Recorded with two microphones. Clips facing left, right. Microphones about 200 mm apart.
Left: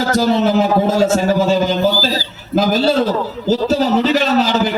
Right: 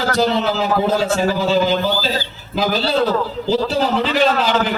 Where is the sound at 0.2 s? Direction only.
45° left (ahead or behind).